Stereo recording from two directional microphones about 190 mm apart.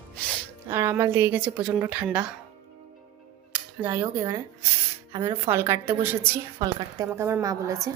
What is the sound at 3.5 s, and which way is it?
A woman's voice, 10° right (ahead or behind).